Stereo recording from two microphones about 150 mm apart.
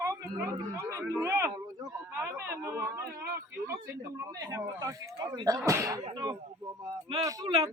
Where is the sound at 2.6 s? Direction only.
20° right (ahead or behind).